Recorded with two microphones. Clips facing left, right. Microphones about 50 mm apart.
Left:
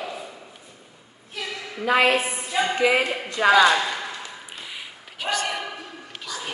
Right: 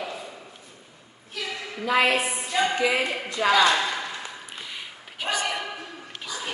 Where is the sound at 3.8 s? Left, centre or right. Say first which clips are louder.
Left 1 dB; centre.